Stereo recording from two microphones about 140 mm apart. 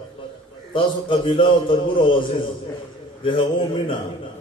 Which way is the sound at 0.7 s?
40° left (ahead or behind).